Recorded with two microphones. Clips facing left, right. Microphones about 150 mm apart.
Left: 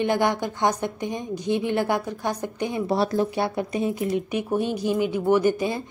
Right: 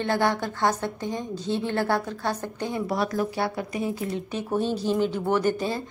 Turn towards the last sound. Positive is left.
turn(degrees=15)  # may be behind; listen again after turning